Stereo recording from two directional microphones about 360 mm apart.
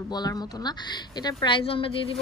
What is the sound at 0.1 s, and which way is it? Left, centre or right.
Speech, centre.